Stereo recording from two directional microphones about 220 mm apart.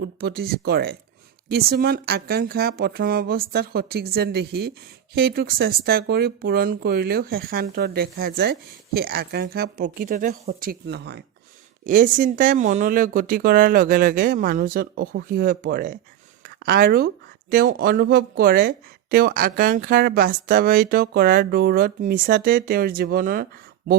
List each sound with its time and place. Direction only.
0.0 s speech: 45° right (ahead or behind)
11.9 s speech: 35° right (ahead or behind)